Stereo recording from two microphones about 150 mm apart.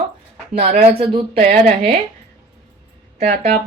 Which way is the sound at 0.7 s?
40° right (ahead or behind).